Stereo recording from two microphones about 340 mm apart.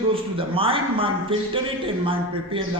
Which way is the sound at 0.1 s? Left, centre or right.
Centre.